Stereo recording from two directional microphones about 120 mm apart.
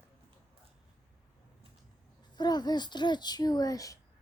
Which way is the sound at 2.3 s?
35° left (ahead or behind).